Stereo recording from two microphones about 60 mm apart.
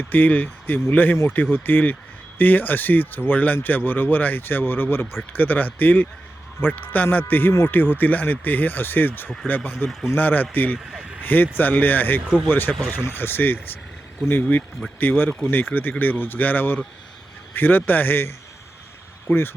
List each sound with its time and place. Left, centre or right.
0.1 s speech: left
14.9 s speech: left